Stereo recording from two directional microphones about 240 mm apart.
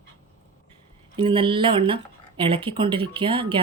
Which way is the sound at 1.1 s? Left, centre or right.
Right.